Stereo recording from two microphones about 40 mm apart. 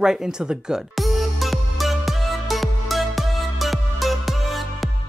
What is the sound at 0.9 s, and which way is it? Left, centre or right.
Music, centre.